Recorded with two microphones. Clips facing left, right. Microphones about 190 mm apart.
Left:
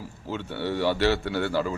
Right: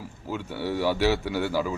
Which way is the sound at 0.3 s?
10° right (ahead or behind).